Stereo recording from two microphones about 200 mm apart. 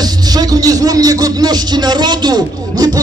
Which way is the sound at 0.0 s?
20° right (ahead or behind).